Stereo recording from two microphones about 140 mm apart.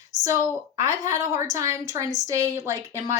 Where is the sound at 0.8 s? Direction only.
25° right (ahead or behind).